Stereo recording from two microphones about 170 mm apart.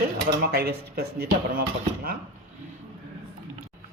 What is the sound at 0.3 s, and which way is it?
Speech, 70° right (ahead or behind).